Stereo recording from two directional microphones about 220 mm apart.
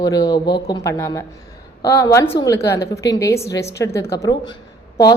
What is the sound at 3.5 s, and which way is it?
Speech, 50° left (ahead or behind).